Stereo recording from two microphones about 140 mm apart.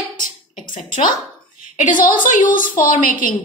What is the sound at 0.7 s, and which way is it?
A woman's voice, 75° left (ahead or behind).